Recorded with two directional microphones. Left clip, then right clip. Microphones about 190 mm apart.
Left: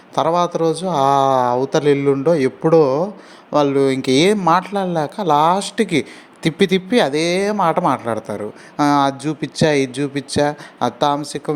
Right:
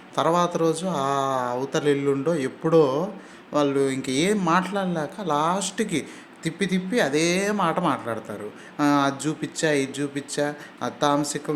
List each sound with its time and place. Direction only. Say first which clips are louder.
0.2 s speech: left 5 dB; 25° left (ahead or behind)